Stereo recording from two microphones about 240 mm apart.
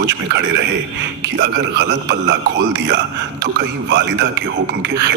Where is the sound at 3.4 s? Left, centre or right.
Right.